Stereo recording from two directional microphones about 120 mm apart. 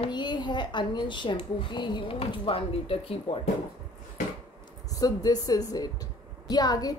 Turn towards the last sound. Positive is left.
turn(degrees=35)  # may be behind; listen again after turning